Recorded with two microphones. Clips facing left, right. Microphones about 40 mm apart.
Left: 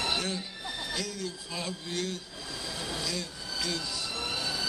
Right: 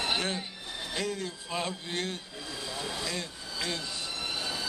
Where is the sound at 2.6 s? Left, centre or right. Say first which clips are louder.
Even; right.